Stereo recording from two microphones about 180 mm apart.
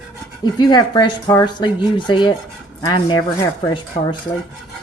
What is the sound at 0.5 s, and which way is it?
Speech, 25° left (ahead or behind).